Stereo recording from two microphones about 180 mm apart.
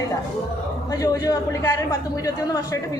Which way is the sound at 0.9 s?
20° left (ahead or behind).